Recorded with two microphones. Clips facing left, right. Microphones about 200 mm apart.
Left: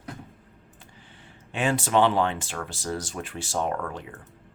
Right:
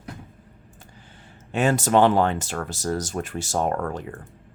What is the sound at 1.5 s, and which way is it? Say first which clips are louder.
Speech: right 4 dB; 45° right (ahead or behind).